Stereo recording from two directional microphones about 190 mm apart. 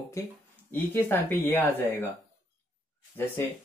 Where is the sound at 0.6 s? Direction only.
10° left (ahead or behind).